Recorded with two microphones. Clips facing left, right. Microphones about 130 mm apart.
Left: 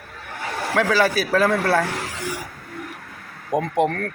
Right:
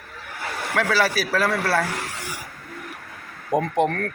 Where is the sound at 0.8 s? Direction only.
20° left (ahead or behind).